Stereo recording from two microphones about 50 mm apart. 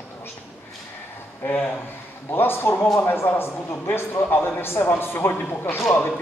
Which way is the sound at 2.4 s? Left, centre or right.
Left.